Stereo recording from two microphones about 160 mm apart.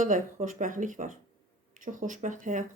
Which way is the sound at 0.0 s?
55° right (ahead or behind).